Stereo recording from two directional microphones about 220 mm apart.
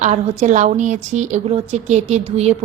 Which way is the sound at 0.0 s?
30° right (ahead or behind).